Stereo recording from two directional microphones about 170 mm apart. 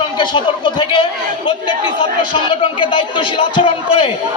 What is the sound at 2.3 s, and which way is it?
A man's voice, 30° left (ahead or behind).